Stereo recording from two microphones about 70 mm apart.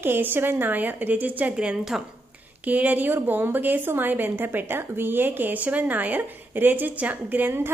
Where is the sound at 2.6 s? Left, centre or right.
Right.